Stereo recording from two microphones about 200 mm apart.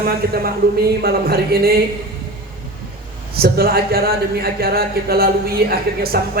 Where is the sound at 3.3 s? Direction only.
50° right (ahead or behind).